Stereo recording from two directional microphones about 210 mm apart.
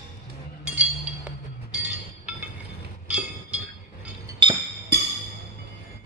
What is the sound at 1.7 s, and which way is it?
Train, 5° right (ahead or behind).